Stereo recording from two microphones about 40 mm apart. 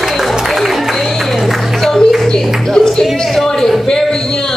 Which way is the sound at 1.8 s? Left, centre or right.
Centre.